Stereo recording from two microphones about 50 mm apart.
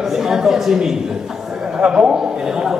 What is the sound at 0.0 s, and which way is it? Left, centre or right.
A man's voice, centre.